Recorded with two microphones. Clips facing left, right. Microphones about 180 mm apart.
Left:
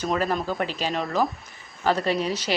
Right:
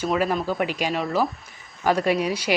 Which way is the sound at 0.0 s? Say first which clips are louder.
Right 2 dB; 10° right (ahead or behind).